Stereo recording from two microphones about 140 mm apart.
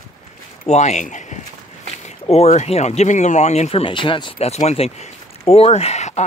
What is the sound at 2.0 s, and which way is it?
Speech, 50° left (ahead or behind).